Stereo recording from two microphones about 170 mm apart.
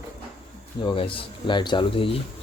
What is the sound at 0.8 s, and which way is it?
Speech, 30° left (ahead or behind).